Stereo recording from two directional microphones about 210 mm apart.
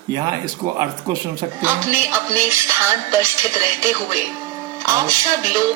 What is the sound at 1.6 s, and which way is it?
Music, 10° right (ahead or behind).